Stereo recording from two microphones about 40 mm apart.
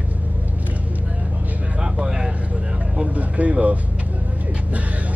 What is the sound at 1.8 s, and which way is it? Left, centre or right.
Vehicle, centre.